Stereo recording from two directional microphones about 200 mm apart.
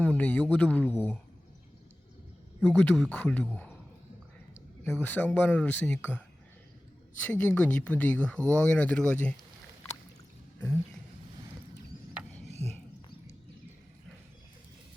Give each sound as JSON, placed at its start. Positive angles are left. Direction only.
{"t": 0.0, "sound": "speech", "side_deg": 5}
{"t": 2.6, "sound": "speech", "side_deg": 0}
{"t": 4.8, "sound": "speech", "side_deg": 10}
{"t": 7.3, "sound": "speech", "side_deg": 5}
{"t": 12.5, "sound": "a sound", "side_deg": -35}